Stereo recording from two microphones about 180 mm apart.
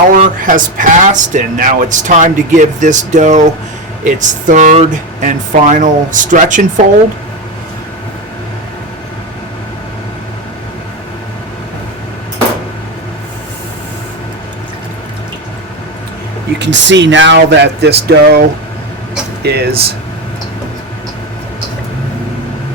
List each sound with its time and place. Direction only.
0.1 s speech: 50° right (ahead or behind)
16.6 s speech: 80° right; by 19.7 s 65° right (ahead or behind)